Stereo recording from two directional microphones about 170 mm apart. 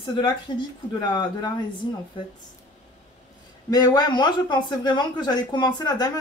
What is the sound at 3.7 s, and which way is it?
Speech, 25° left (ahead or behind).